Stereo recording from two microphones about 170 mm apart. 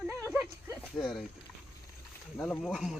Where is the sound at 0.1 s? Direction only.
15° right (ahead or behind).